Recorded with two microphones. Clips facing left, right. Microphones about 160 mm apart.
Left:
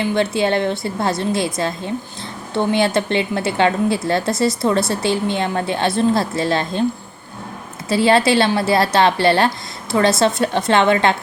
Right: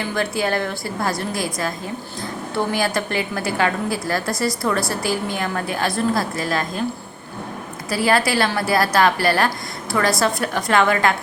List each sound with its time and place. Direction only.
0.0 s a woman's voice: 25° left (ahead or behind)
7.9 s a woman's voice: 25° left (ahead or behind)